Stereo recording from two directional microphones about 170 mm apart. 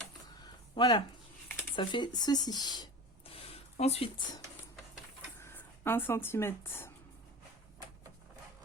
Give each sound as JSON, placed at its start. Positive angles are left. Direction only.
{"t": 0.8, "sound": "speech", "side_deg": 25}
{"t": 1.7, "sound": "a sound", "side_deg": 30}
{"t": 5.4, "sound": "speech", "side_deg": 15}